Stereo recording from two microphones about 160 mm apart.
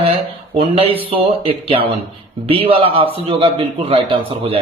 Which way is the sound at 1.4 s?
35° right (ahead or behind).